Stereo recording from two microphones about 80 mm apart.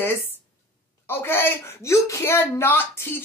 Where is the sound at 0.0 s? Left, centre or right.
Left.